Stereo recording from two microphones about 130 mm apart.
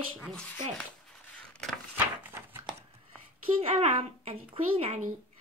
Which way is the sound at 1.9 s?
15° right (ahead or behind).